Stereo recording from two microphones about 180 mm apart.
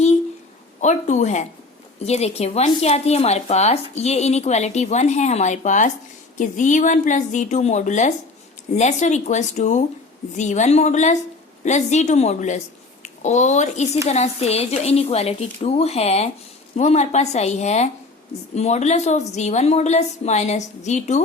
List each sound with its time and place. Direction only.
0.8 s a woman's voice: 40° left (ahead or behind)